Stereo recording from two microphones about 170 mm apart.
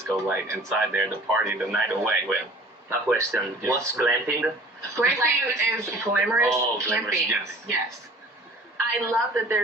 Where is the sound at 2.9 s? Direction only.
10° right (ahead or behind).